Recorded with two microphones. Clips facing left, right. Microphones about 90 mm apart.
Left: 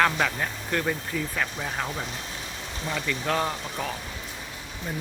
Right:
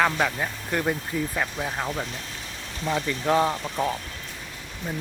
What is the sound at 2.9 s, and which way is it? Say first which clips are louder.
Speech: right 5 dB; 25° right (ahead or behind).